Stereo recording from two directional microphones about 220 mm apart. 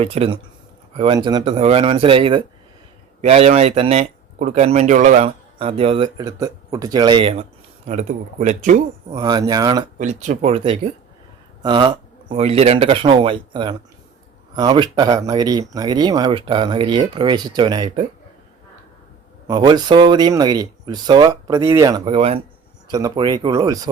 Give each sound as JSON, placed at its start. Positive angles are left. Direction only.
{"t": 0.0, "sound": "speech", "side_deg": -25}
{"t": 9.1, "sound": "speech", "side_deg": -15}
{"t": 10.0, "sound": "speech", "side_deg": -35}
{"t": 19.5, "sound": "speech", "side_deg": -20}